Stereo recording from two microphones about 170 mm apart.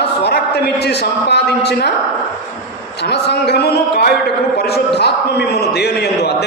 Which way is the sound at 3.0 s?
75° left (ahead or behind).